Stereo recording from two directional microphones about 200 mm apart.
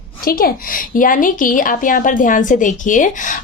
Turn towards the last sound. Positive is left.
turn(degrees=40)  # may be behind; listen again after turning